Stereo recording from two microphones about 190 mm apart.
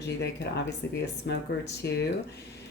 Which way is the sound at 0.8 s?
65° left (ahead or behind).